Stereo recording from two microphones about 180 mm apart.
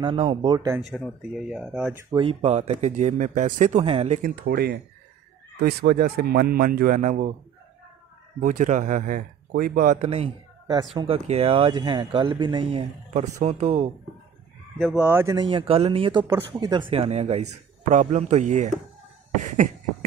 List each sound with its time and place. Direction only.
0.0 s speech: 30° right (ahead or behind)
0.7 s speech: centre (ahead or behind)
2.1 s speech: 35° right (ahead or behind)
4.2 s speech: 60° right (ahead or behind); by 7.3 s 45° right (ahead or behind)
8.4 s speech: 45° right (ahead or behind)
10.0 s speech: 35° right (ahead or behind)
13.1 s speech: 40° right (ahead or behind)
14.8 s speech: centre (ahead or behind)
15.0 s speech: 10° right (ahead or behind)
15.3 s speech: 30° right (ahead or behind)
19.4 s beatboxing: 45° right (ahead or behind)